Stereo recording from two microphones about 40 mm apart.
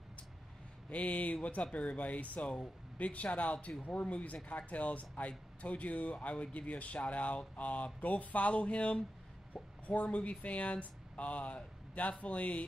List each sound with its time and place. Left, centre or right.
0.8 s speech: left